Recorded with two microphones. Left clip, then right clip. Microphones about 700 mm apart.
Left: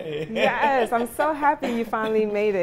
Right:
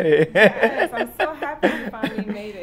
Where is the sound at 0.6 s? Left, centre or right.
Right.